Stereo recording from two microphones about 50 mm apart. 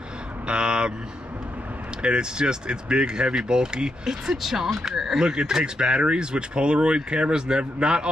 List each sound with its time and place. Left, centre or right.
0.5 s vehicle: centre
2.0 s speech: centre